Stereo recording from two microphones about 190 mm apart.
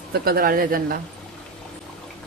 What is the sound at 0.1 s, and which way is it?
Speech, 50° right (ahead or behind).